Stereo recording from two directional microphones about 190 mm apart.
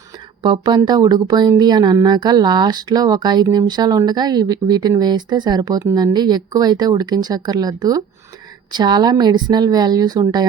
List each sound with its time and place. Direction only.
0.4 s a woman's voice: 25° right (ahead or behind)